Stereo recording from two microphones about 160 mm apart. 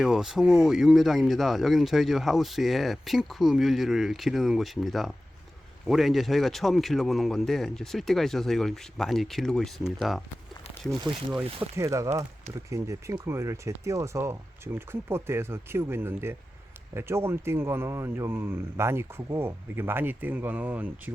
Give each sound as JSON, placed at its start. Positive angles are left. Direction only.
{"t": 0.0, "sound": "speech", "side_deg": 0}
{"t": 11.8, "sound": "speech", "side_deg": -20}